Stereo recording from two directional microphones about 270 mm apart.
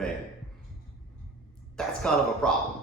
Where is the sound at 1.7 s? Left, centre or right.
Centre.